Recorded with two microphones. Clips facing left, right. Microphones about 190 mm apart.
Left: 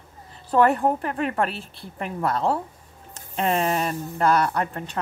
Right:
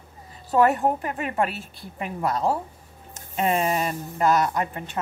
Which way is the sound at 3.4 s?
5° right (ahead or behind).